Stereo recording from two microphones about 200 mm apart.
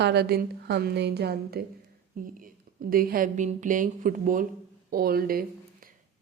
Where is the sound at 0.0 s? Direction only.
55° right (ahead or behind).